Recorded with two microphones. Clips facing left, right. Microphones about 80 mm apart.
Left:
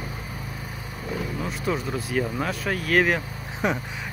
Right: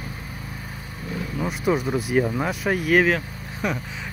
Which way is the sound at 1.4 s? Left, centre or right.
Centre.